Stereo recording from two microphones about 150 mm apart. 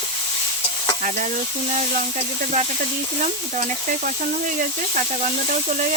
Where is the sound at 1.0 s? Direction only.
60° right (ahead or behind).